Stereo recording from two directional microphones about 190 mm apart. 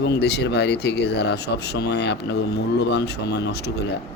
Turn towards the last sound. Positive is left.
turn(degrees=60)  # may be behind; listen again after turning